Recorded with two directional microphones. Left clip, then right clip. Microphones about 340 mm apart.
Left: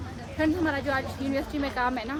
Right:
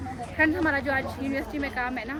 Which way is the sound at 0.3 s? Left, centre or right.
Centre.